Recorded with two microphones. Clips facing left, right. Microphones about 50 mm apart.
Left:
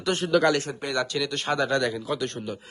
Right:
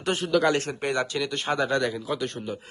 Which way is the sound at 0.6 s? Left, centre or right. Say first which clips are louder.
Right 3 dB; right.